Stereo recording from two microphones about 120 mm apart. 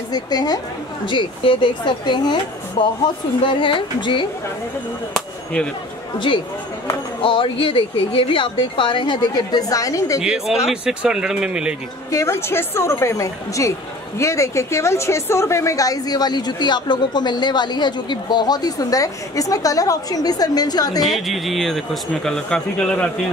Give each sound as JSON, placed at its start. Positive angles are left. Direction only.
{"t": 0.1, "sound": "a woman's voice", "side_deg": 35}
{"t": 1.0, "sound": "a woman's voice", "side_deg": 45}
{"t": 2.8, "sound": "speech", "side_deg": 50}
{"t": 5.1, "sound": "speech", "side_deg": 10}
{"t": 6.1, "sound": "a woman's voice", "side_deg": 40}
{"t": 10.2, "sound": "speech", "side_deg": -5}
{"t": 12.1, "sound": "a woman's voice", "side_deg": 25}
{"t": 21.0, "sound": "speech", "side_deg": 0}